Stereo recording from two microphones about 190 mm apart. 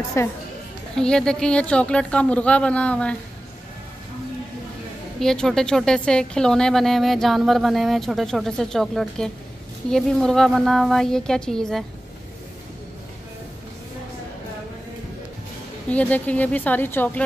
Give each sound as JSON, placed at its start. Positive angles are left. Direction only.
{"t": 0.2, "sound": "speech", "side_deg": 15}
{"t": 0.9, "sound": "speech", "side_deg": 5}
{"t": 5.2, "sound": "speech", "side_deg": 5}
{"t": 15.9, "sound": "speech", "side_deg": 5}